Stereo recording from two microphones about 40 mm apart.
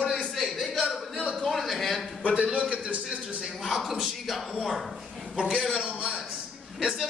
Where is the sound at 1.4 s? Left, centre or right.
Centre.